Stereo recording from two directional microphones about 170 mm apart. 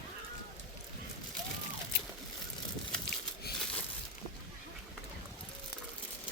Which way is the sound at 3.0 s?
65° left (ahead or behind).